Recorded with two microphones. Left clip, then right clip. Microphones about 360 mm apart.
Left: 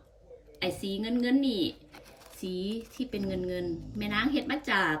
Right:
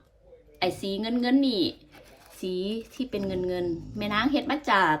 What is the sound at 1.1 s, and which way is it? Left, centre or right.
A woman's voice, right.